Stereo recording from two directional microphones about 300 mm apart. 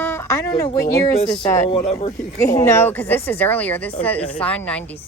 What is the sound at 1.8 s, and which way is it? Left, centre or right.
Speech, left.